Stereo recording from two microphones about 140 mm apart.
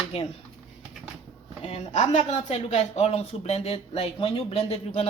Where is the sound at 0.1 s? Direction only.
45° left (ahead or behind).